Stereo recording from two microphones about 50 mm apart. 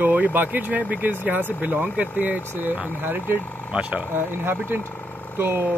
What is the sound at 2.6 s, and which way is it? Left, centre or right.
Speech, right.